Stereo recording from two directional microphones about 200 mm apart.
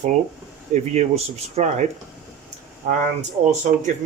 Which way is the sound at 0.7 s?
30° right (ahead or behind).